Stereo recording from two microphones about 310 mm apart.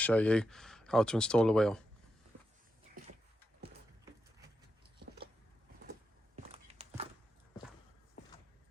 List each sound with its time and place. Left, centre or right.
0.0 s speech: centre
6.5 s walk: centre